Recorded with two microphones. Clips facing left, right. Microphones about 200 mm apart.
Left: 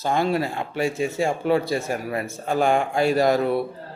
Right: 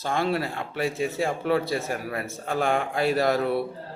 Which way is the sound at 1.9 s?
15° left (ahead or behind).